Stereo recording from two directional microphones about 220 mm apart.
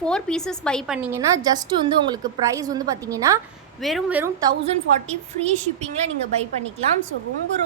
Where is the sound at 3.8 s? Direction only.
Centre (ahead or behind); by 6.1 s 30° right (ahead or behind).